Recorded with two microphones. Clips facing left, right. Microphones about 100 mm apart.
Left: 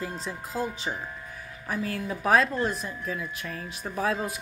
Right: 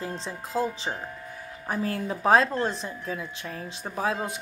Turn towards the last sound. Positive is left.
turn(degrees=-25)  # may be behind; listen again after turning